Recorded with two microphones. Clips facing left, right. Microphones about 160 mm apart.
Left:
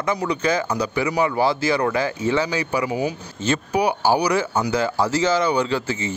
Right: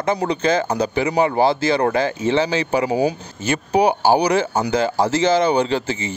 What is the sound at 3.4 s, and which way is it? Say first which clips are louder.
Speech: even; 10° right (ahead or behind).